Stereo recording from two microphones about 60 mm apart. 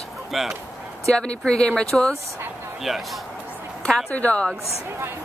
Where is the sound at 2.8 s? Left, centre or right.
Centre.